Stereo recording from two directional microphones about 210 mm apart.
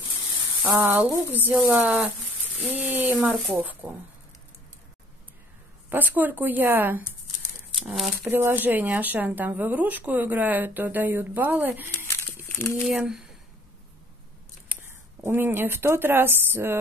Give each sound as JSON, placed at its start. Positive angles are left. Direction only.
{"t": 0.8, "sound": "speech", "side_deg": -10}
{"t": 5.9, "sound": "speech", "side_deg": -10}
{"t": 12.4, "sound": "crumpling", "side_deg": 10}
{"t": 12.7, "sound": "speech", "side_deg": -5}
{"t": 14.7, "sound": "speech", "side_deg": -10}